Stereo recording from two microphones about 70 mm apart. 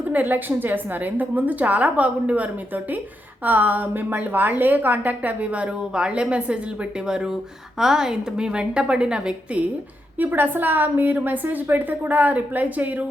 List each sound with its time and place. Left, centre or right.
0.1 s a woman's voice: right; by 9.6 s centre
10.2 s a woman's voice: right